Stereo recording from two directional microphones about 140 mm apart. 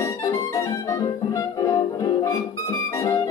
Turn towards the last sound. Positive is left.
turn(degrees=20)  # may be behind; listen again after turning